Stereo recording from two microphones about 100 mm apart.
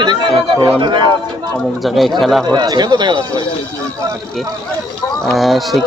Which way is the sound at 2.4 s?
45° right (ahead or behind).